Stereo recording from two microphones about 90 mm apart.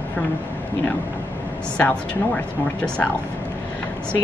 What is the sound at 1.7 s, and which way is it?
Speech, 15° left (ahead or behind).